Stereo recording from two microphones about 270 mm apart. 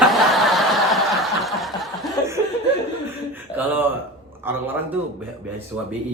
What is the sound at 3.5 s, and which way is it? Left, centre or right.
A man's voice, centre.